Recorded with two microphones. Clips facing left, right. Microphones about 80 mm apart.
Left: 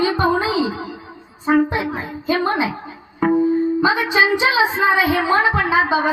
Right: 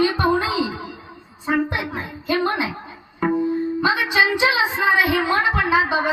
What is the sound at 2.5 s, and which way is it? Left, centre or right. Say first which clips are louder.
Speech: left 4 dB; left.